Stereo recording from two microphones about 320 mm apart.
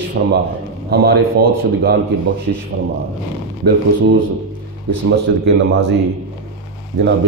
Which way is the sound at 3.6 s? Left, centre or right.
Right.